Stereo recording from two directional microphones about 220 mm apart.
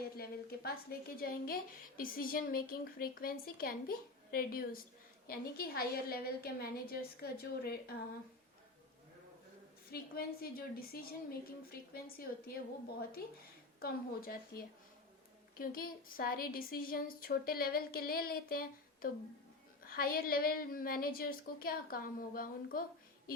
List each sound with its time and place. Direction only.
0.2 s a woman's voice: 45° left (ahead or behind)
9.9 s a woman's voice: 45° left (ahead or behind)
13.7 s a woman's voice: 45° left (ahead or behind)